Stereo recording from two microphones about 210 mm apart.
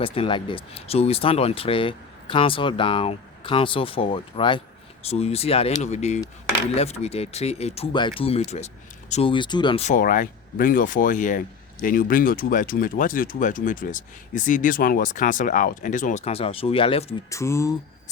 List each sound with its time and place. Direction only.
0.0 s speech: 25° left (ahead or behind)
17.2 s speech: 15° left (ahead or behind)